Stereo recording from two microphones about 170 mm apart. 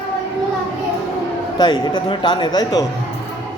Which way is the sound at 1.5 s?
25° left (ahead or behind).